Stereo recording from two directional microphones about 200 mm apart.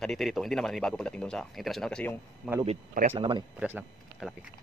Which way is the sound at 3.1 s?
25° right (ahead or behind).